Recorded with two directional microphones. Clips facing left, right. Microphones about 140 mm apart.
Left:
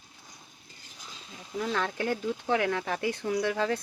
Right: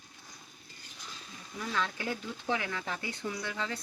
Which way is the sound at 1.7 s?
55° left (ahead or behind).